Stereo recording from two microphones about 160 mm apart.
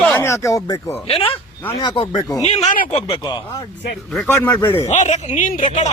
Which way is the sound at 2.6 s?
60° left (ahead or behind).